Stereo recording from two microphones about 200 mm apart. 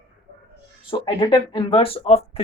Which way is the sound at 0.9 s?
25° left (ahead or behind).